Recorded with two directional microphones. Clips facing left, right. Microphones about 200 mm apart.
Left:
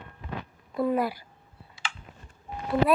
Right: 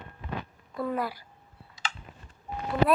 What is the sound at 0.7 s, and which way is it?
Speech, 15° left (ahead or behind).